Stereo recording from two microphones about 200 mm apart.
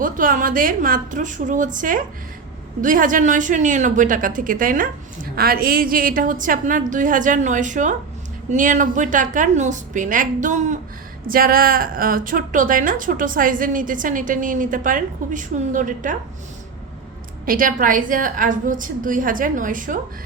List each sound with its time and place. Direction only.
0.0 s a woman's voice: 45° right (ahead or behind)
17.4 s a woman's voice: 45° right (ahead or behind)